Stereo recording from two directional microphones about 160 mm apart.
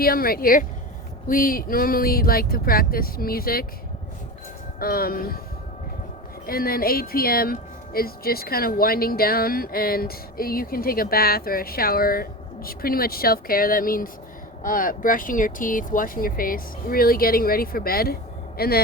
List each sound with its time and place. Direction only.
0.0 s speech: 65° left (ahead or behind)
4.8 s speech: 70° left (ahead or behind)
6.4 s speech: 65° left (ahead or behind)